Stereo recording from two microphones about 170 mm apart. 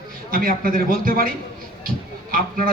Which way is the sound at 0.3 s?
55° right (ahead or behind).